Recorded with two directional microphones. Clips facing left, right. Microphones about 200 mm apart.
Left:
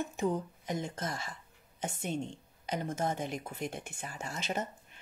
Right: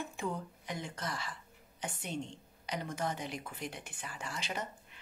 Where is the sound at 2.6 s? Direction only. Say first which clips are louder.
Left 4 dB; 45° left (ahead or behind).